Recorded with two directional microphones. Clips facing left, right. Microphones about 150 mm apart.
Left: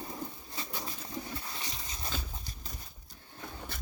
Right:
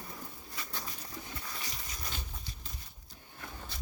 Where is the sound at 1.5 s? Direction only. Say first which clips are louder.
Left 2 dB; 25° left (ahead or behind).